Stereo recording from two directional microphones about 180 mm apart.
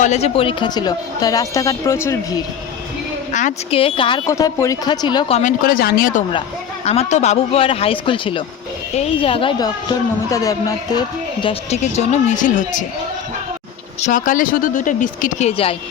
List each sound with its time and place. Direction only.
0.0 s speech: 40° left (ahead or behind); by 2.4 s 15° left (ahead or behind)
3.3 s speech: 35° left (ahead or behind)
4.3 s speech: 15° left (ahead or behind)
5.4 s speech: 50° left (ahead or behind)
6.8 s speech: 35° left (ahead or behind)
11.8 s speech: 40° left (ahead or behind)
14.0 s speech: 45° left (ahead or behind)